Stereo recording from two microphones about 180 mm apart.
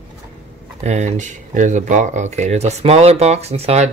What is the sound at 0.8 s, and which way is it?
Speech, 40° right (ahead or behind).